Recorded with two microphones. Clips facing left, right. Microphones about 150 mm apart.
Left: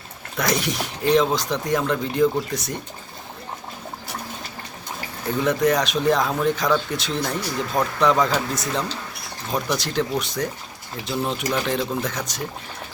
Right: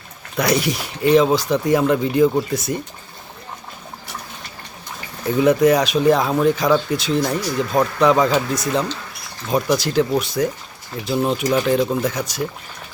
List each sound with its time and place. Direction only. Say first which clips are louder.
0.3 s speech: right 4 dB; centre (ahead or behind)
5.4 s speech: right 6 dB; 5° right (ahead or behind)